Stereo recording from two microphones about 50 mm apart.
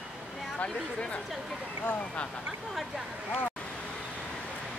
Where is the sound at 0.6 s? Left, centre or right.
Left.